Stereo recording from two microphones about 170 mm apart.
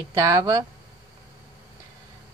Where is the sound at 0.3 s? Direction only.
20° right (ahead or behind).